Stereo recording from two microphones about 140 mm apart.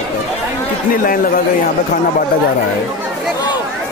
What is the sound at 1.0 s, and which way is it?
Speech, 90° left.